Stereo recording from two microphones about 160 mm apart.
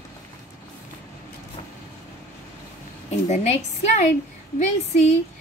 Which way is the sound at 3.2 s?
45° left (ahead or behind).